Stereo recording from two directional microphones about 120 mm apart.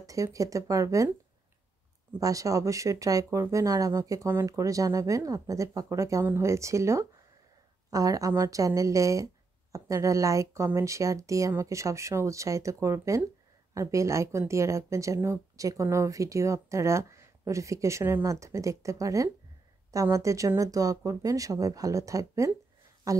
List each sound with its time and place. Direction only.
0.0 s speech: 30° right (ahead or behind)
2.1 s speech: 30° right (ahead or behind)